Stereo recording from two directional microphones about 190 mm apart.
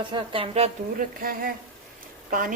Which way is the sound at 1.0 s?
50° right (ahead or behind).